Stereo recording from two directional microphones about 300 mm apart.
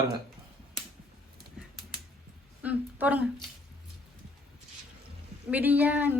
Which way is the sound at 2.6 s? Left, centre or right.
Centre.